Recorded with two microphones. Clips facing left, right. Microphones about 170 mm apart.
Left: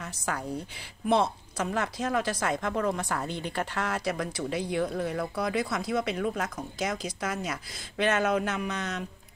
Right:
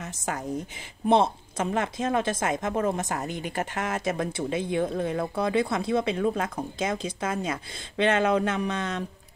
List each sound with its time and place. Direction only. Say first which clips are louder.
0.0 s speech: right 1 dB; 20° right (ahead or behind)